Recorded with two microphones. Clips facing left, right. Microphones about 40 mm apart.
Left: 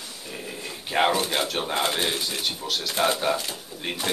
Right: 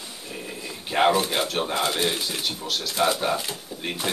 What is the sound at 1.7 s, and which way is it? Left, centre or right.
Speech, left.